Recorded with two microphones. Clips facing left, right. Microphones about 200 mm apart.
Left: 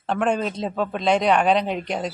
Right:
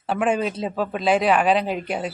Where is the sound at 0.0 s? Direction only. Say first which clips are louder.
Right 1 dB; 5° right (ahead or behind).